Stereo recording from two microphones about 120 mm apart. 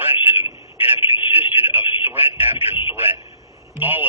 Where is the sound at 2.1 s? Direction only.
15° right (ahead or behind).